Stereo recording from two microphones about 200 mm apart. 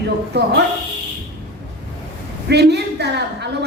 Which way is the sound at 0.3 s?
55° right (ahead or behind).